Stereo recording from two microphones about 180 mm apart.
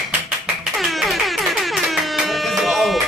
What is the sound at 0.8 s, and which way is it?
Music, centre (ahead or behind).